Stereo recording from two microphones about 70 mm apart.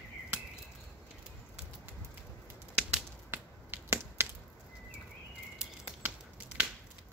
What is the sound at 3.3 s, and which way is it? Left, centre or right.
Finger snapping, right.